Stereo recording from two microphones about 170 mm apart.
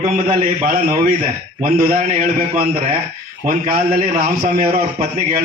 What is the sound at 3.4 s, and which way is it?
A man's voice, 55° right (ahead or behind).